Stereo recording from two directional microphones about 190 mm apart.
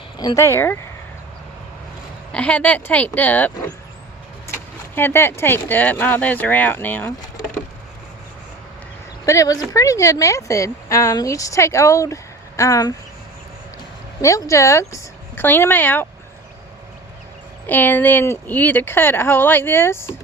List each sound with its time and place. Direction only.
0.2 s speech: 20° left (ahead or behind)
2.3 s speech: 5° left (ahead or behind)
4.9 s speech: 10° left (ahead or behind)
9.2 s speech: 15° left (ahead or behind)
14.2 s speech: 15° left (ahead or behind)
17.7 s speech: 10° left (ahead or behind)